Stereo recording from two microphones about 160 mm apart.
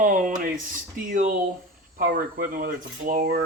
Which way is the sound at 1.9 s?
60° right (ahead or behind).